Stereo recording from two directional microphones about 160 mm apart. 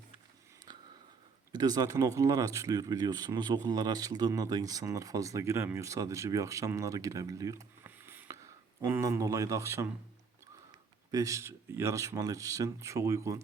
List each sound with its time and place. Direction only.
1.5 s speech: 25° right (ahead or behind)
11.1 s speech: 20° right (ahead or behind)